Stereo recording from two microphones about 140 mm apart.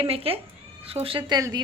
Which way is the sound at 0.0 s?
45° right (ahead or behind).